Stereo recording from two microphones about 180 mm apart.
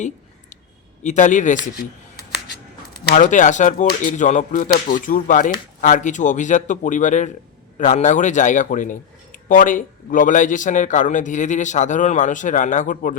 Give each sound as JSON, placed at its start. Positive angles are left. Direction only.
{"t": 1.0, "sound": "speech", "side_deg": 45}
{"t": 3.0, "sound": "speech", "side_deg": 60}
{"t": 3.2, "sound": "speech", "side_deg": 45}